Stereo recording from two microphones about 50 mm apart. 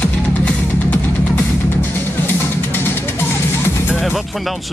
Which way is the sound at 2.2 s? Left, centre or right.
Left.